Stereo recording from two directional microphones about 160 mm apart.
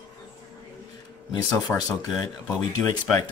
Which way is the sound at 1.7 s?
10° left (ahead or behind).